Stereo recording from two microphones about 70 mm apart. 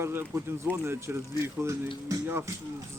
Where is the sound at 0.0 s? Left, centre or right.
Right.